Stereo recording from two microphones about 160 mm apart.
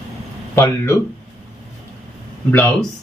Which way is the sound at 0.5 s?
15° left (ahead or behind).